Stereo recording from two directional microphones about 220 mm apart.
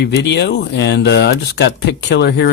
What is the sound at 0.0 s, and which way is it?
Speech, 50° left (ahead or behind).